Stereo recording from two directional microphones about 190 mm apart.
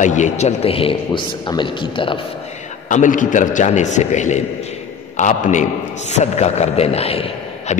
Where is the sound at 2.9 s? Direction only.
40° left (ahead or behind).